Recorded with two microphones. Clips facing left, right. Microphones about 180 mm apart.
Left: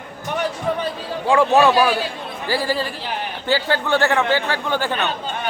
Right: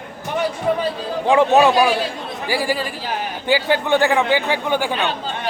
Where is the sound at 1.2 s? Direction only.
20° right (ahead or behind).